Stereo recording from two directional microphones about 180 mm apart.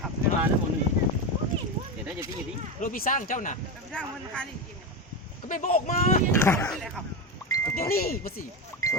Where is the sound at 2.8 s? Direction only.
50° left (ahead or behind).